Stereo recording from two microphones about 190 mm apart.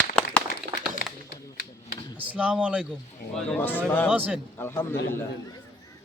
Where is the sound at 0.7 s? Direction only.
60° right (ahead or behind).